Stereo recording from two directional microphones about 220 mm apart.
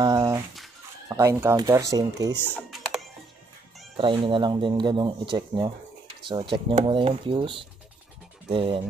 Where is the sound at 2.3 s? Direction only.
10° left (ahead or behind).